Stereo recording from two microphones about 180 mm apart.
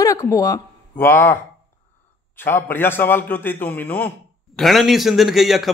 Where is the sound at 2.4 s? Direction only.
10° left (ahead or behind).